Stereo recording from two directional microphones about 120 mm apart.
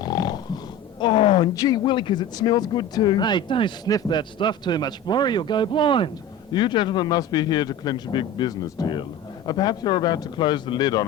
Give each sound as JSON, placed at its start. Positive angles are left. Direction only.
{"t": 0.0, "sound": "grunt", "side_deg": 35}
{"t": 1.5, "sound": "a man's voice", "side_deg": 35}